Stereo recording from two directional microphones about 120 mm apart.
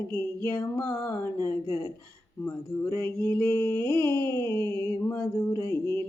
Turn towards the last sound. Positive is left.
turn(degrees=25)  # may be behind; listen again after turning